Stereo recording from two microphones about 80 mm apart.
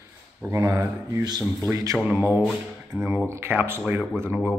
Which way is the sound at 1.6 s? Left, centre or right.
Right.